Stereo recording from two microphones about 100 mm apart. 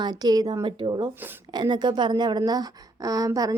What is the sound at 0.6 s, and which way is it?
Speech, 55° right (ahead or behind).